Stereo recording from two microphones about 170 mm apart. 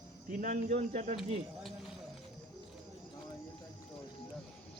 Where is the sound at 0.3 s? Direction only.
50° right (ahead or behind).